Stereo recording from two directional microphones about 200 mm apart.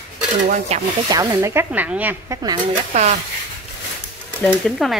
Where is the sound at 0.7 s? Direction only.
30° right (ahead or behind).